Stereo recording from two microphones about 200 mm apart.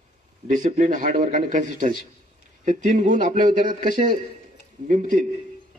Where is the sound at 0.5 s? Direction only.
40° right (ahead or behind).